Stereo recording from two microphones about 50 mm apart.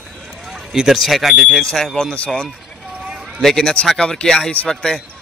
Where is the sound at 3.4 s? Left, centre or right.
Centre.